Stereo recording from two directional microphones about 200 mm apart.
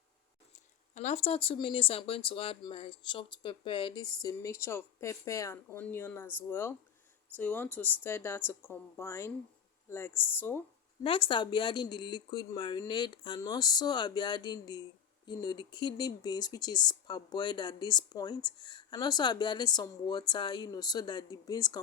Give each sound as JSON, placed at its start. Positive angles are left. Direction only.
{"t": 0.5, "sound": "speech", "side_deg": 35}
{"t": 11.0, "sound": "speech", "side_deg": 25}